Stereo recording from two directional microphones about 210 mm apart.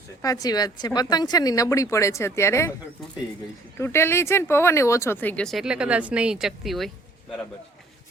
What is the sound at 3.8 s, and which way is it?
Speech, 10° left (ahead or behind).